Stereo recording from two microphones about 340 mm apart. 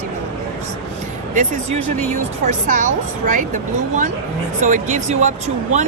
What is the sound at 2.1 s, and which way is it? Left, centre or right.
Speech, right.